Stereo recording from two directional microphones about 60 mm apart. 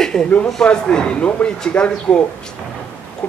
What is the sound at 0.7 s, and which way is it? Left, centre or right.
A man's voice, centre.